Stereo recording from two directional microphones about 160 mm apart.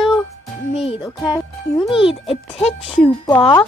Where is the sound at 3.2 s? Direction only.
25° left (ahead or behind).